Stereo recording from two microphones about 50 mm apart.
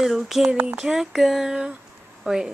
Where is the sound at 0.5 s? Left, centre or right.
Right.